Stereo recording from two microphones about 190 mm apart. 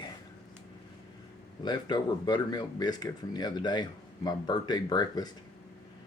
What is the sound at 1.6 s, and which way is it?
Speech, 20° left (ahead or behind).